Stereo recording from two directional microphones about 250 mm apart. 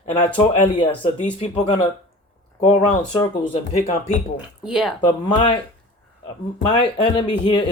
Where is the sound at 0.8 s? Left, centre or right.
Left.